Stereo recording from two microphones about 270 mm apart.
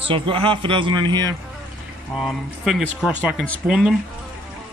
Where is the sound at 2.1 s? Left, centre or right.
Centre.